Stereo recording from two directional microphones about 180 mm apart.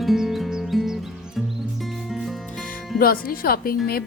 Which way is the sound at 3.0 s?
55° left (ahead or behind).